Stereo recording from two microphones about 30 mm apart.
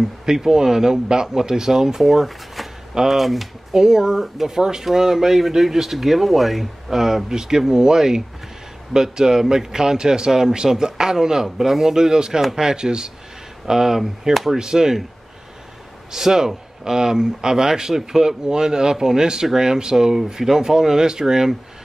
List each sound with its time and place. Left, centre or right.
0.0 s speech: centre
3.7 s speech: right
13.7 s speech: centre
14.6 s speech: centre
16.1 s speech: centre